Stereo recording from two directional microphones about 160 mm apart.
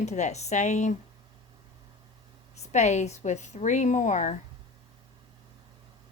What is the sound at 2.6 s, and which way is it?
Speech, 45° left (ahead or behind).